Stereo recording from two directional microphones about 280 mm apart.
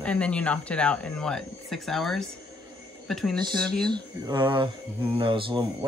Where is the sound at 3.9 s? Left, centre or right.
Centre.